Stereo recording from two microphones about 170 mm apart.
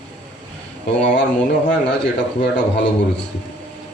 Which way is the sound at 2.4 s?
85° left.